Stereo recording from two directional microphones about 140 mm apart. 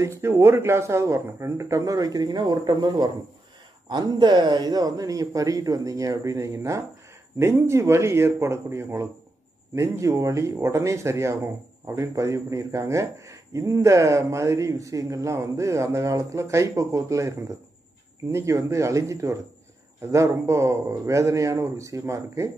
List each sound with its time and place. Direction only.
0.0 s speech: 20° right (ahead or behind)